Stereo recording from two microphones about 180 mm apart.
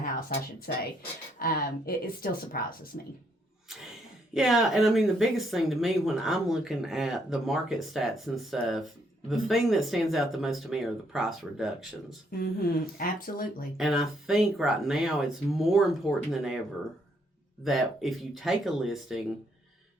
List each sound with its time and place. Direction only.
0.7 s speech: 55° left (ahead or behind)
4.4 s speech: centre (ahead or behind)
12.3 s speech: 55° left (ahead or behind)
13.7 s speech: centre (ahead or behind)
17.6 s speech: centre (ahead or behind)